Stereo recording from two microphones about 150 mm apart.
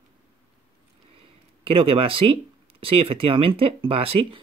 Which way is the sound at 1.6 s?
40° right (ahead or behind).